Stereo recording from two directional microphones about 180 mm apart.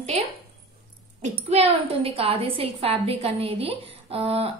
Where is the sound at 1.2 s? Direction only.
35° right (ahead or behind).